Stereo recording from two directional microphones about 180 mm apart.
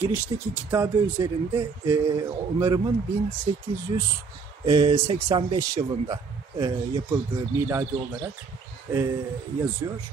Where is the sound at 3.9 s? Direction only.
30° right (ahead or behind); by 8.2 s 15° right (ahead or behind).